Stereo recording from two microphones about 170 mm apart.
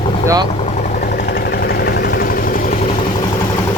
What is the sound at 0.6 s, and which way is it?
Vehicle, 55° left (ahead or behind).